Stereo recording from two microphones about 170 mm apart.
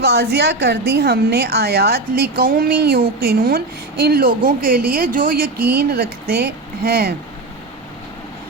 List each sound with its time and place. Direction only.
0.0 s a woman's voice: 80° right